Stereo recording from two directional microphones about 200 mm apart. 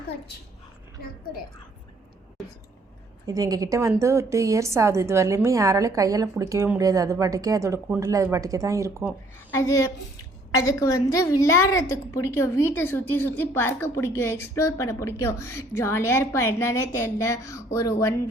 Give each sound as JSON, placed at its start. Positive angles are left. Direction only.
{"t": 3.2, "sound": "a woman's voice", "side_deg": -15}
{"t": 9.5, "sound": "a woman's voice", "side_deg": 15}